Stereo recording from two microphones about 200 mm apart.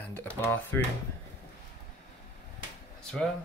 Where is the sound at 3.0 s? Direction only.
5° left (ahead or behind).